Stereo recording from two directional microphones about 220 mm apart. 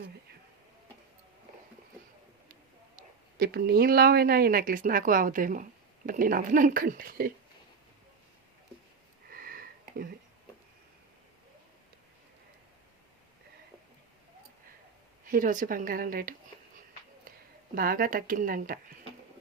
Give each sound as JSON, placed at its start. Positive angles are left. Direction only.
{"t": 3.3, "sound": "speech", "side_deg": -45}
{"t": 9.3, "sound": "a sound", "side_deg": -40}
{"t": 15.2, "sound": "speech", "side_deg": -40}
{"t": 17.7, "sound": "speech", "side_deg": -40}